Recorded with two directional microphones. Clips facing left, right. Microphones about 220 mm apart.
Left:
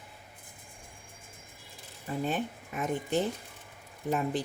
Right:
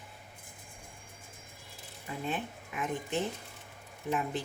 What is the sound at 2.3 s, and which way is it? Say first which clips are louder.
Speech: left 4 dB; 40° left (ahead or behind).